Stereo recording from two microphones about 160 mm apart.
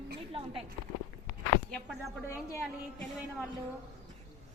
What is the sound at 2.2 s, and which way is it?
Speech, 15° left (ahead or behind).